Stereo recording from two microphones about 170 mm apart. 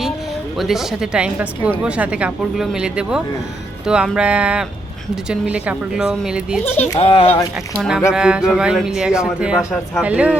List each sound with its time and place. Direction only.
0.5 s speech: centre (ahead or behind)
7.0 s speech: 30° left (ahead or behind)
7.8 s speech: 5° right (ahead or behind)